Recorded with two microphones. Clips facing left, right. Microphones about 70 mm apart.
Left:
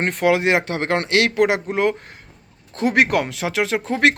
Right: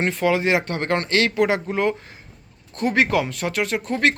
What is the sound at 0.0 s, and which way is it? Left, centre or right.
Speech, left.